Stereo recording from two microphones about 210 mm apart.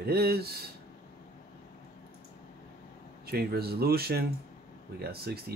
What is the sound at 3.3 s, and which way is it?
Speech, 50° right (ahead or behind).